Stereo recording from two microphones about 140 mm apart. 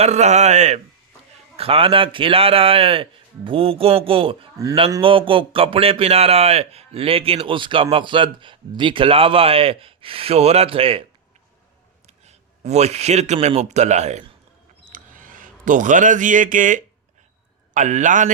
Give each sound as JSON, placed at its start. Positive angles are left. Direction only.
{"t": 0.0, "sound": "speech", "side_deg": -55}
{"t": 1.5, "sound": "a man's voice", "side_deg": -40}
{"t": 12.0, "sound": "a sound", "side_deg": -50}
{"t": 13.6, "sound": "speech", "side_deg": -55}
{"t": 14.9, "sound": "a sound", "side_deg": -75}
{"t": 17.7, "sound": "speech", "side_deg": -60}